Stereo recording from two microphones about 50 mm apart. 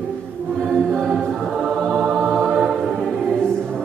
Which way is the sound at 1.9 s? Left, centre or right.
Centre.